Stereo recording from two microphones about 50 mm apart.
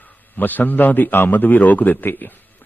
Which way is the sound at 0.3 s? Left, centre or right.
Left.